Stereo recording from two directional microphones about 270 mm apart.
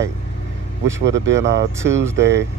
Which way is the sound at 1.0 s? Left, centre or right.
Right.